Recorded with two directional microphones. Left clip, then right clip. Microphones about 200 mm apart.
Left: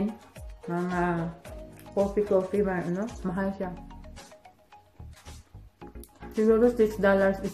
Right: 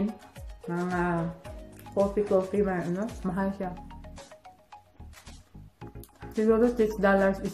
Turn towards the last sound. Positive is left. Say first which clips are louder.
# left 1 dB
turn(degrees=-5)  # may be behind; listen again after turning